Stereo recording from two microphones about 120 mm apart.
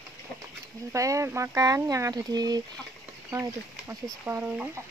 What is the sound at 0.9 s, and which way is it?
Speech, 25° right (ahead or behind).